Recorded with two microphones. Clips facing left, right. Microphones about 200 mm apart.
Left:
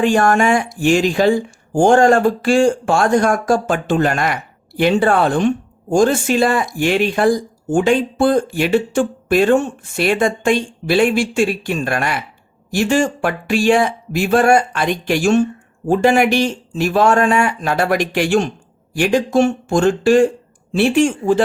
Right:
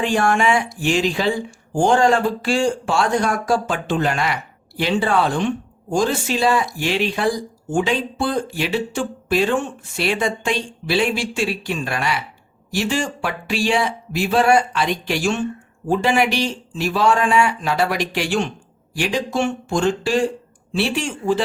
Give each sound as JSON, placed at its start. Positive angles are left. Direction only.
{"t": 0.0, "sound": "speech", "side_deg": 45}